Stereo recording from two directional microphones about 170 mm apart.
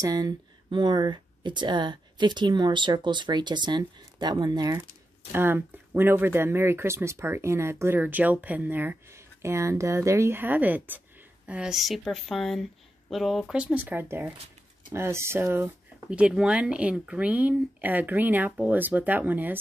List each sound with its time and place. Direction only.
0.0 s speech: 20° right (ahead or behind)